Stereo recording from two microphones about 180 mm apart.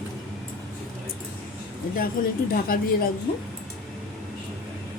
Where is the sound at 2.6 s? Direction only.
55° left (ahead or behind).